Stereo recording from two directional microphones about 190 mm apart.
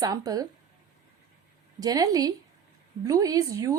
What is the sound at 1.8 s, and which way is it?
A woman's voice, 20° right (ahead or behind).